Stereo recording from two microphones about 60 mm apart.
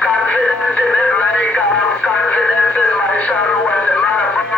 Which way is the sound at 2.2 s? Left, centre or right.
Left.